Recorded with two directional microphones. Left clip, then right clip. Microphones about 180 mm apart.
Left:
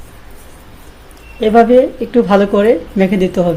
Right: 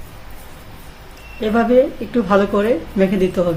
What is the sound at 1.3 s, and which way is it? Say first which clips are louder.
Speech: left 6 dB; 35° left (ahead or behind).